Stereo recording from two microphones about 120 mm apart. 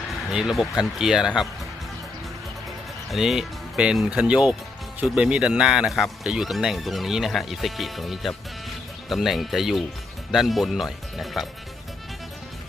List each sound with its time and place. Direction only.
0.3 s speech: 5° right (ahead or behind)
3.1 s speech: centre (ahead or behind)